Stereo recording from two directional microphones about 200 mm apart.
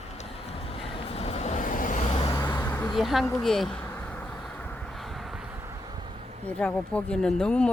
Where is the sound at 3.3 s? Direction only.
5° left (ahead or behind); by 6.1 s 20° right (ahead or behind).